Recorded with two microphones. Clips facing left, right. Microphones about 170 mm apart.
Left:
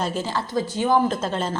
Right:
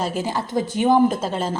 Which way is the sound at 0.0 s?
10° right (ahead or behind).